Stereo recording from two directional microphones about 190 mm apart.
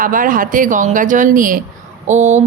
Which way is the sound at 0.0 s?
45° right (ahead or behind).